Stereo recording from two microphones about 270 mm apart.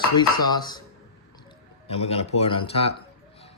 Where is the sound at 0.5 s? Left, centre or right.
Centre.